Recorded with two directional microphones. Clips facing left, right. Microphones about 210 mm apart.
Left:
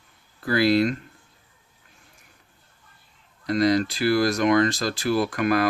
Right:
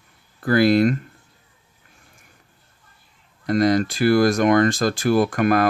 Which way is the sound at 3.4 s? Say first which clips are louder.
Right 2 dB; 50° right (ahead or behind).